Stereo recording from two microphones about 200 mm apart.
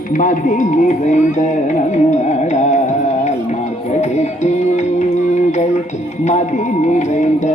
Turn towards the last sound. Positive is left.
turn(degrees=35)  # may be behind; listen again after turning